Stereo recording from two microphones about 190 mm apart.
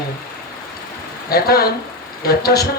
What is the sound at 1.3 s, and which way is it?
A man's voice, 55° left (ahead or behind).